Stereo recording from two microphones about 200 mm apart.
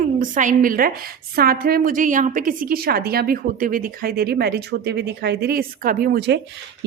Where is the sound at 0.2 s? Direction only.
40° right (ahead or behind).